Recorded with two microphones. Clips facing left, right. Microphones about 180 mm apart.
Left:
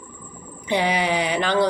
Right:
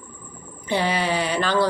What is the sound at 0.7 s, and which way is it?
Speech, 15° left (ahead or behind).